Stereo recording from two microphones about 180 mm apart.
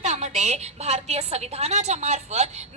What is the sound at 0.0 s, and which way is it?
A woman's voice, 40° right (ahead or behind).